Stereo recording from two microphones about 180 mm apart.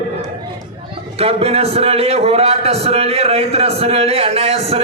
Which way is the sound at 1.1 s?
35° right (ahead or behind).